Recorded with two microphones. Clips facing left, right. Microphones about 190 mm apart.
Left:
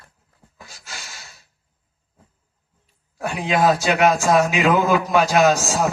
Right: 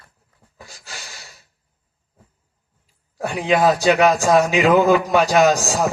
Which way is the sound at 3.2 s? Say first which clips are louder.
Right 2 dB; 40° right (ahead or behind).